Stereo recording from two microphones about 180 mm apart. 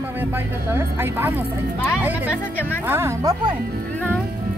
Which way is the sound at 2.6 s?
10° left (ahead or behind).